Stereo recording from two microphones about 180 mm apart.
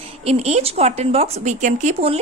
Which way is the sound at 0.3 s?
35° right (ahead or behind).